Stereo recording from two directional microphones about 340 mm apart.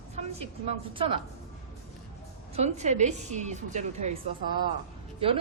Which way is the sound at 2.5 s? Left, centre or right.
Centre.